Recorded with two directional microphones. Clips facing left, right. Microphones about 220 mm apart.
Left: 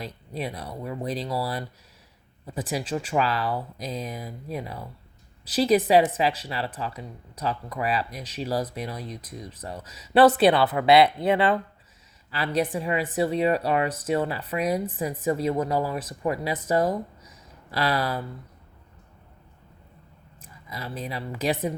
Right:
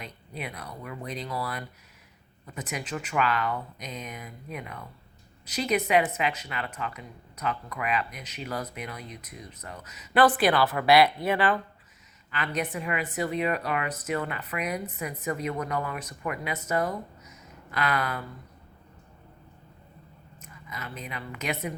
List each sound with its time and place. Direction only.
0.0 s speech: 30° left (ahead or behind)
20.4 s a woman's voice: 35° left (ahead or behind)